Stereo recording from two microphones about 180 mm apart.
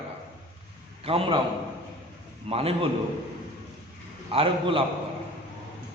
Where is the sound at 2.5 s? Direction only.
30° right (ahead or behind).